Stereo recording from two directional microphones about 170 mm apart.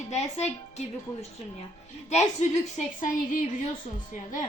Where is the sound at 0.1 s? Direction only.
40° left (ahead or behind).